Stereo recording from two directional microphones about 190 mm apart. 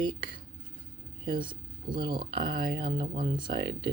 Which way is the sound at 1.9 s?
25° right (ahead or behind).